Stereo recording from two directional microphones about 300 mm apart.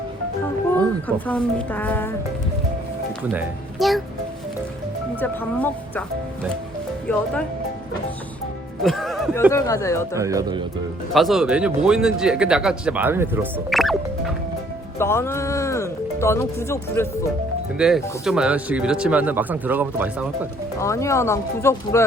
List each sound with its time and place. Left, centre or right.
1.0 s speech: centre
3.3 s speech: centre
5.2 s speech: centre
7.1 s speech: centre
8.8 s speech: centre
10.2 s speech: centre
11.1 s speech: centre
17.7 s speech: centre
20.7 s speech: centre